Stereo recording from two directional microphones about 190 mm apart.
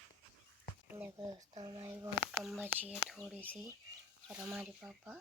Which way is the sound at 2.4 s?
Centre (ahead or behind).